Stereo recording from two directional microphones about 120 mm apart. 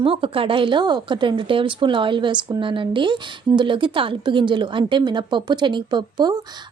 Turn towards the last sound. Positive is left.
turn(degrees=-40)  # may be behind; listen again after turning